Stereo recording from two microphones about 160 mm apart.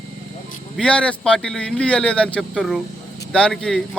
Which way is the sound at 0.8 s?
5° left (ahead or behind).